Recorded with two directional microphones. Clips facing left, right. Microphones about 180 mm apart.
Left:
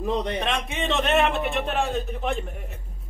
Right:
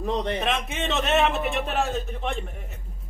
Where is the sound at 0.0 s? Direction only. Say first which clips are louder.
Even; centre (ahead or behind).